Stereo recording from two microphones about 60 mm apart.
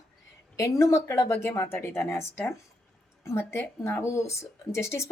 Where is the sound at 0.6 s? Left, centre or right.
Left.